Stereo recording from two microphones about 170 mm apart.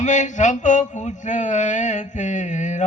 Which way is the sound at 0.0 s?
45° left (ahead or behind).